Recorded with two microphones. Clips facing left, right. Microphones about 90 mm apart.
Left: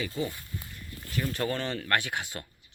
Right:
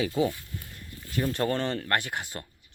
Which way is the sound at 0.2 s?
70° right (ahead or behind).